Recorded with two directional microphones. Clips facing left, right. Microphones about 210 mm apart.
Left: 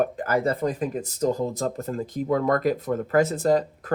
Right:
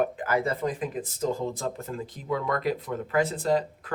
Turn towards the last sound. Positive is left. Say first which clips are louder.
# left 4 dB
turn(degrees=45)  # may be behind; listen again after turning